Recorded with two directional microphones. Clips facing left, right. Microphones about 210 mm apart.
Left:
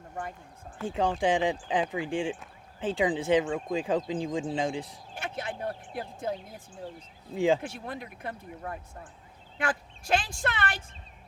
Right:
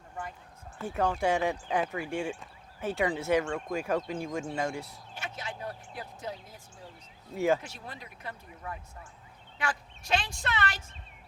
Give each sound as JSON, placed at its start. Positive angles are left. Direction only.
{"t": 0.1, "sound": "a sound", "side_deg": 50}
{"t": 0.9, "sound": "speech", "side_deg": 15}
{"t": 5.1, "sound": "speech", "side_deg": 55}
{"t": 7.3, "sound": "speech", "side_deg": 15}
{"t": 7.6, "sound": "speech", "side_deg": 55}